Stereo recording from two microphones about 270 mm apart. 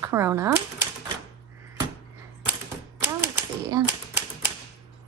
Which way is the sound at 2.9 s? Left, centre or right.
Centre.